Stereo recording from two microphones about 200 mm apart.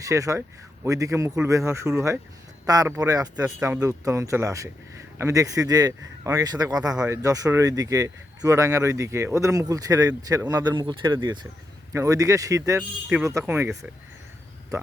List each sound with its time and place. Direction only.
0.0 s speech: 15° right (ahead or behind)